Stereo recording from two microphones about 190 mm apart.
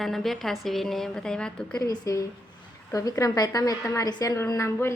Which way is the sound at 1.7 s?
20° left (ahead or behind).